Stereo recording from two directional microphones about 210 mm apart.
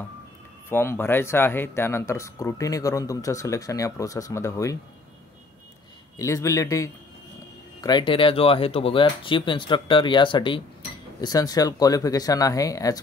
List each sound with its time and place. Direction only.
0.7 s speech: 10° left (ahead or behind)
6.1 s speech: 15° left (ahead or behind)